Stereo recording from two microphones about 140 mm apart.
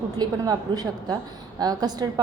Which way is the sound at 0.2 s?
30° right (ahead or behind).